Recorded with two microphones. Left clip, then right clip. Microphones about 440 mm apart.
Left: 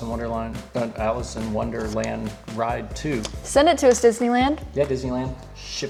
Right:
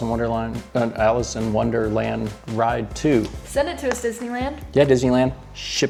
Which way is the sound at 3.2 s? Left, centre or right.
Left.